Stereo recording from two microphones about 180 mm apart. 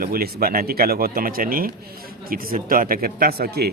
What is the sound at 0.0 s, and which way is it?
A man's voice, 55° right (ahead or behind).